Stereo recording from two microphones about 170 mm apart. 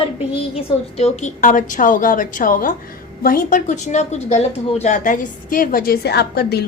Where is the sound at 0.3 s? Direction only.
35° left (ahead or behind).